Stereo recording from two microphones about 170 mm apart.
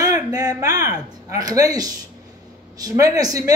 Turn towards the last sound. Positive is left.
turn(degrees=-20)  # may be behind; listen again after turning